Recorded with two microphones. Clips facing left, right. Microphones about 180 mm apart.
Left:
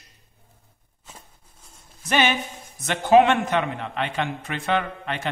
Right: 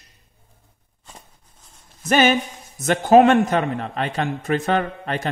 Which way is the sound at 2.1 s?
45° right (ahead or behind).